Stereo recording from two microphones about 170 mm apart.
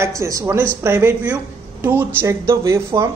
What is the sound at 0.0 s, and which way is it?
A woman's voice, 15° right (ahead or behind).